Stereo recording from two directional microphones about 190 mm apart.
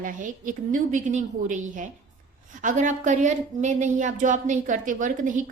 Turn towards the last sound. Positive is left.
turn(degrees=-40)  # may be behind; listen again after turning